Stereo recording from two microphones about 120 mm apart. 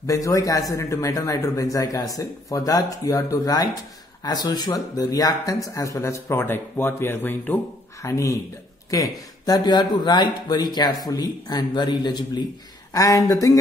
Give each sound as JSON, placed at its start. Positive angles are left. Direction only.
{"t": 0.0, "sound": "speech", "side_deg": 30}